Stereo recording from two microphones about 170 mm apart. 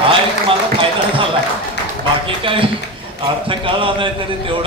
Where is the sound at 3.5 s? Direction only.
30° right (ahead or behind).